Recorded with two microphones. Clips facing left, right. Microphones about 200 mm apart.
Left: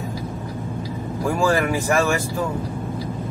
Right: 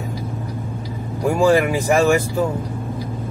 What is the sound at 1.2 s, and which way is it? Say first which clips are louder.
Speech: right 5 dB; 15° right (ahead or behind).